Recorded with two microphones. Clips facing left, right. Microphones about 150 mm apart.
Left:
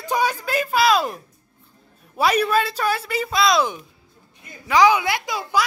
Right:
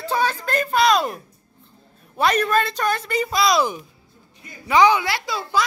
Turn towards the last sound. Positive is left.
turn(degrees=10)  # may be behind; listen again after turning